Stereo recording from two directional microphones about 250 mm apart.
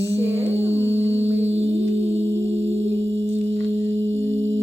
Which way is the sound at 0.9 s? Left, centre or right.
Right.